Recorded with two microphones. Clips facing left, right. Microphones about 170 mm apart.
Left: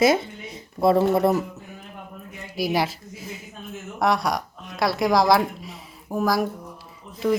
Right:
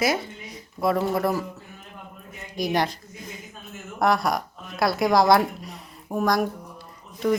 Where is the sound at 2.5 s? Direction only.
5° left (ahead or behind).